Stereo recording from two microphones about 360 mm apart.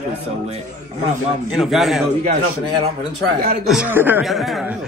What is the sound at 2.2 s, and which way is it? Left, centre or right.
Speech, centre.